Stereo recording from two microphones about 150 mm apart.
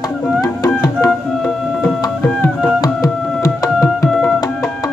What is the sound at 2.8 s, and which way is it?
Music, 25° left (ahead or behind).